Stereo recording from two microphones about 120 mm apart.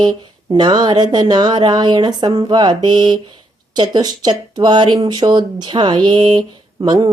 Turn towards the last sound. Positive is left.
turn(degrees=-30)  # may be behind; listen again after turning